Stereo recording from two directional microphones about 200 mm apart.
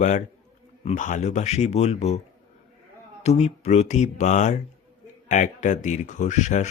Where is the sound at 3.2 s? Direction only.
35° left (ahead or behind).